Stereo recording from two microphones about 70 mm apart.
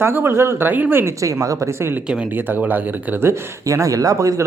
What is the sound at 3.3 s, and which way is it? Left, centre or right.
A man's voice, right.